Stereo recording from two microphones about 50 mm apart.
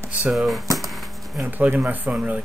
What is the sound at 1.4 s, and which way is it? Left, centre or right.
Speech, right.